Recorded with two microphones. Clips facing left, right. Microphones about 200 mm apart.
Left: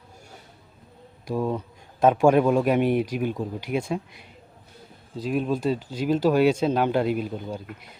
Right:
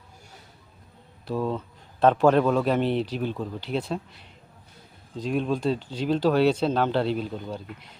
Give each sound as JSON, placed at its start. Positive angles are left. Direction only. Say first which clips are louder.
{"t": 1.3, "sound": "speech", "louder": "left 1 dB", "side_deg": 15}